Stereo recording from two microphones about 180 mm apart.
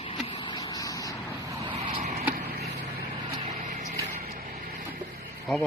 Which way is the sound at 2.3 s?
55° right (ahead or behind).